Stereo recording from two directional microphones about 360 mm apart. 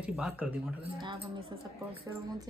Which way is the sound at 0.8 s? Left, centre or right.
Centre.